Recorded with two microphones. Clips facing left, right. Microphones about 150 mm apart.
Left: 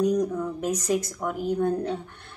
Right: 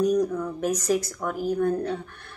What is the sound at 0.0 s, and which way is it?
A woman's voice, 20° left (ahead or behind).